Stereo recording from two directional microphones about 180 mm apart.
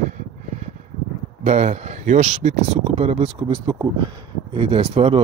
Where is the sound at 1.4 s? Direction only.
40° right (ahead or behind).